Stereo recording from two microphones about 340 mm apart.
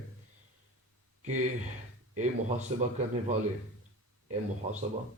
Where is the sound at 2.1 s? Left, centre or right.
Right.